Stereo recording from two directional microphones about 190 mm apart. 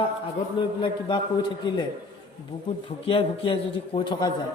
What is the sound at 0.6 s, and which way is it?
Speech, 25° left (ahead or behind).